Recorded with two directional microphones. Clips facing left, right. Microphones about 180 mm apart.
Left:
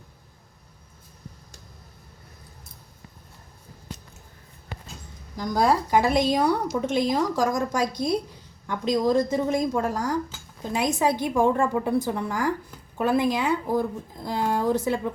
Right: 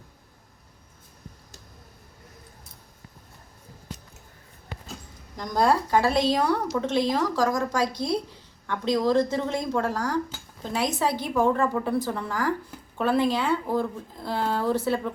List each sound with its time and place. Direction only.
5.4 s speech: 10° left (ahead or behind)